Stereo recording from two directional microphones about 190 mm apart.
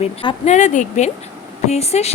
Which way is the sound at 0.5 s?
40° left (ahead or behind).